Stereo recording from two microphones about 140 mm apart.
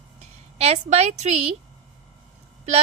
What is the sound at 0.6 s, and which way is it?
Speech, 50° right (ahead or behind).